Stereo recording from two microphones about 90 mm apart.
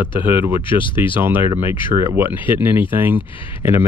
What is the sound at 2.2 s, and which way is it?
Speech, 25° right (ahead or behind).